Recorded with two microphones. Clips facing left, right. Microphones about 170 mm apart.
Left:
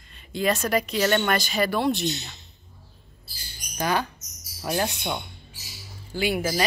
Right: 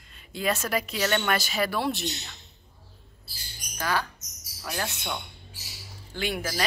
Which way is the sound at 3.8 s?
20° left (ahead or behind).